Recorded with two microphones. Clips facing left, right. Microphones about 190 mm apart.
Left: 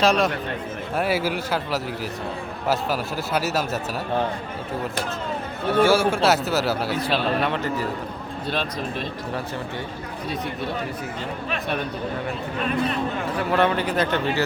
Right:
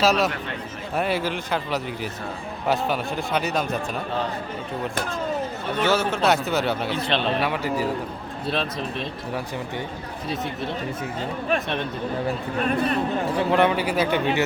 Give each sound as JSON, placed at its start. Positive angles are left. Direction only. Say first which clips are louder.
{"t": 0.0, "sound": "speech", "louder": "left 1 dB", "side_deg": -5}
{"t": 0.9, "sound": "speech", "louder": "left 1 dB", "side_deg": 5}
{"t": 5.7, "sound": "speech", "louder": "left 4 dB", "side_deg": 10}
{"t": 7.4, "sound": "speech", "louder": "right 1 dB", "side_deg": -10}
{"t": 12.5, "sound": "speech", "louder": "right 1 dB", "side_deg": -45}
{"t": 13.4, "sound": "speech", "louder": "even", "side_deg": -15}